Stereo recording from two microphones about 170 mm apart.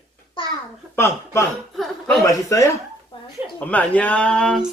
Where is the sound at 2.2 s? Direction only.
20° left (ahead or behind).